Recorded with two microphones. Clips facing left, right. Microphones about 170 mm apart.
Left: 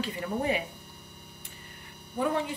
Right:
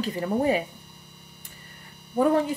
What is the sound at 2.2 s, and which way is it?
Speech, 45° right (ahead or behind).